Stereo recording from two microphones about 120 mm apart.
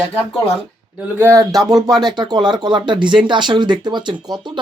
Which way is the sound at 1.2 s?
25° right (ahead or behind).